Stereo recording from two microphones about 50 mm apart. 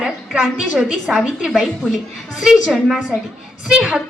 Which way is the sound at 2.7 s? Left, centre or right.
Centre.